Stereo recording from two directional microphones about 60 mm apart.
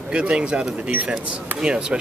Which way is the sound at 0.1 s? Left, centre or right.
Centre.